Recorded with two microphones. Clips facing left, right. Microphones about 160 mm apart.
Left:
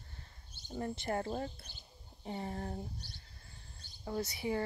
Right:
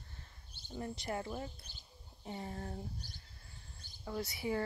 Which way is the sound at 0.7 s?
45° left (ahead or behind).